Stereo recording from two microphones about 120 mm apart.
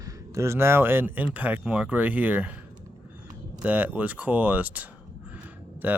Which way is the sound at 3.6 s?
10° right (ahead or behind).